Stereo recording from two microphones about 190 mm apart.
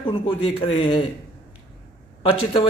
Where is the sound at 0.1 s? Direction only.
30° left (ahead or behind).